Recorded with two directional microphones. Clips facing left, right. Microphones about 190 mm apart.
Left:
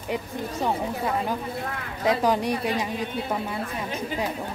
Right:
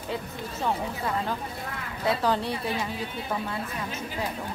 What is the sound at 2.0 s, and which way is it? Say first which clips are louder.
Speech: left 3 dB; 15° left (ahead or behind).